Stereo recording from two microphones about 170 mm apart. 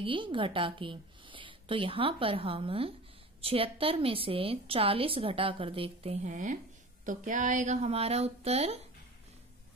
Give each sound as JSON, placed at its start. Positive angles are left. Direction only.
{"t": 0.0, "sound": "a woman's voice", "side_deg": -30}
{"t": 6.2, "sound": "a woman's voice", "side_deg": -45}